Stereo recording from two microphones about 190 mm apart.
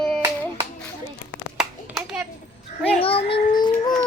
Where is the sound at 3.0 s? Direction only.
30° left (ahead or behind).